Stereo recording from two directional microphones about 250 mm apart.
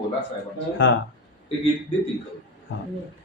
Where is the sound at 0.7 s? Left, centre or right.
Left.